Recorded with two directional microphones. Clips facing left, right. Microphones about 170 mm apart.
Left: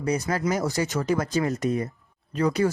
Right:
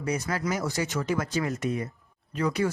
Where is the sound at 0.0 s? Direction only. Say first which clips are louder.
Left 4 dB; 35° left (ahead or behind).